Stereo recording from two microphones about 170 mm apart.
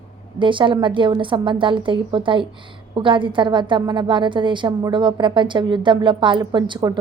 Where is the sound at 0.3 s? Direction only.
30° right (ahead or behind).